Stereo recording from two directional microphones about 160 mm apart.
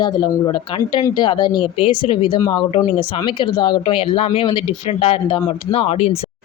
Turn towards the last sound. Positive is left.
turn(degrees=40)  # may be behind; listen again after turning